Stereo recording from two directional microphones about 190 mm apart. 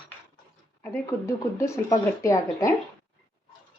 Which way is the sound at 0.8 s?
15° left (ahead or behind).